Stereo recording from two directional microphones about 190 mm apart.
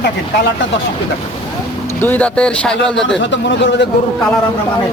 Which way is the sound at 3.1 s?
75° left (ahead or behind).